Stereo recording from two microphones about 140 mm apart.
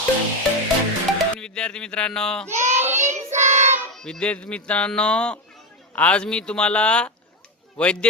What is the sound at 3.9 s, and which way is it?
Music, 5° left (ahead or behind).